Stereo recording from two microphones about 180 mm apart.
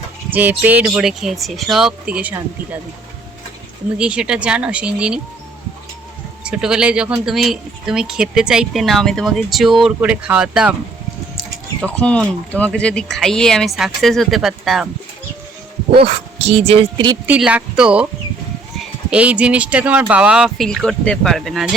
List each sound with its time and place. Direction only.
0.3 s speech: 10° right (ahead or behind)
3.9 s speech: 5° right (ahead or behind)
6.4 s speech: 5° right (ahead or behind)
11.8 s speech: 5° left (ahead or behind)
15.9 s speech: 30° right (ahead or behind)
17.2 s speech: 5° right (ahead or behind)